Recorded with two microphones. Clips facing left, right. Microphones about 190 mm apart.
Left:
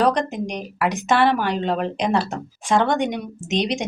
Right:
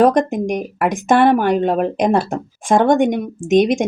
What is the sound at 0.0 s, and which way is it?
Speech, 50° right (ahead or behind).